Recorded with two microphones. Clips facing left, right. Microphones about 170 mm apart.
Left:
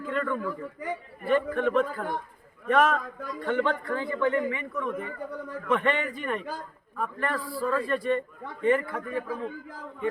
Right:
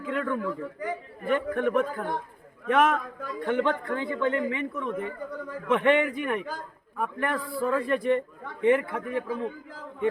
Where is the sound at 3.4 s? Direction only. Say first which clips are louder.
Right 1 dB; 15° right (ahead or behind).